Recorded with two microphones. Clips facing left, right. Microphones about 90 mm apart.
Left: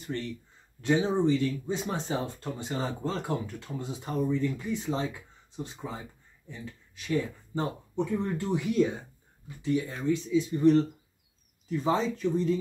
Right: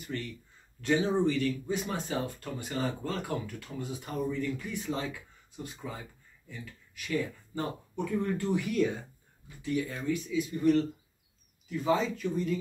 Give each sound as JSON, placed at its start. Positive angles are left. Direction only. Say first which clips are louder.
{"t": 0.0, "sound": "speech", "louder": "left 3 dB", "side_deg": 30}
{"t": 0.7, "sound": "speech", "louder": "left 1 dB", "side_deg": 20}